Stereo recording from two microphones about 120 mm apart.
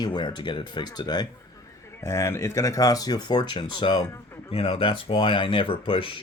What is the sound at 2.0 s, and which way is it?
Speech, 25° left (ahead or behind).